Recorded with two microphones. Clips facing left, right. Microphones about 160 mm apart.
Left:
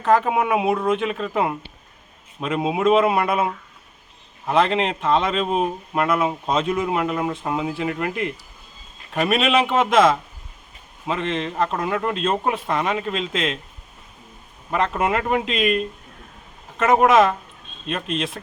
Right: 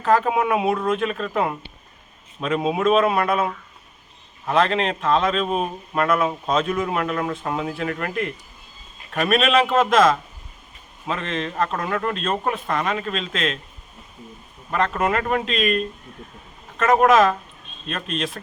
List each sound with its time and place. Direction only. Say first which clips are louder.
0.2 s speech: even; 5° left (ahead or behind)
11.0 s speech: left 2 dB; 15° left (ahead or behind)
14.7 s speech: even; 10° left (ahead or behind)
17.8 s speech: left 2 dB; 15° left (ahead or behind)